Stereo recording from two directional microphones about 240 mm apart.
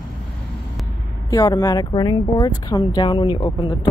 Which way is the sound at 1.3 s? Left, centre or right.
Centre.